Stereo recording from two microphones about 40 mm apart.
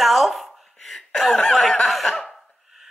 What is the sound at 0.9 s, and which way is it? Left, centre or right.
Chuckle, centre.